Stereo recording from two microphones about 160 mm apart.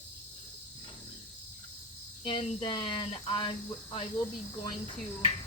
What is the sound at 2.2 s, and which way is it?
Speech, 35° left (ahead or behind).